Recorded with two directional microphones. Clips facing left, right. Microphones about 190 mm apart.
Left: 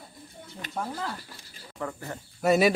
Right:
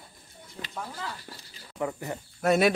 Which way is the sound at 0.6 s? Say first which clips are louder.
Left 4 dB; 50° left (ahead or behind).